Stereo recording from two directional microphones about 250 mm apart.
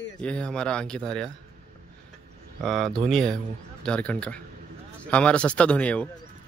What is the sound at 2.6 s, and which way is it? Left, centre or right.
Speech, centre.